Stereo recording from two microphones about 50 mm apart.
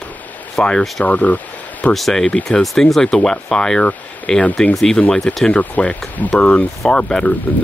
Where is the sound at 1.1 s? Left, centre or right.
Left.